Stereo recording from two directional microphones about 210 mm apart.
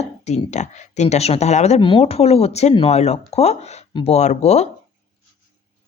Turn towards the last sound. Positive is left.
turn(degrees=30)  # may be behind; listen again after turning